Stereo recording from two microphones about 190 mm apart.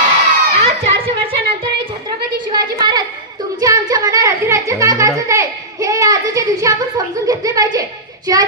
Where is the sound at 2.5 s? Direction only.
25° right (ahead or behind).